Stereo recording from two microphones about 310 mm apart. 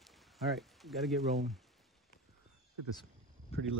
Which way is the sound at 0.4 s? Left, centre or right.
Centre.